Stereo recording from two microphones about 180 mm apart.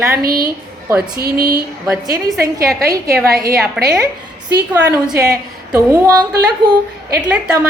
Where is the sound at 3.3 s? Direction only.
60° right (ahead or behind).